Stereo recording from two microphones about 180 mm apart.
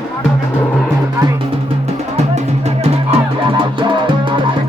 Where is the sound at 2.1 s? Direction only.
35° right (ahead or behind).